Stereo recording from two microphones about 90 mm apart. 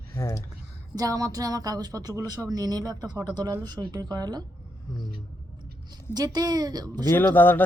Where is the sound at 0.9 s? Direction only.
40° right (ahead or behind).